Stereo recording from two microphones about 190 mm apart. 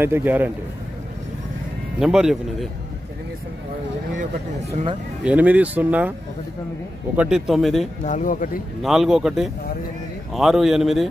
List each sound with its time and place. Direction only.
0.0 s speech: 10° right (ahead or behind)
2.0 s a man's voice: 5° right (ahead or behind)
4.1 s speech: 45° right (ahead or behind)
5.2 s speech: 10° right (ahead or behind)
7.2 s a man's voice: 5° right (ahead or behind)
8.0 s speech: 40° left (ahead or behind)
8.8 s a man's voice: centre (ahead or behind)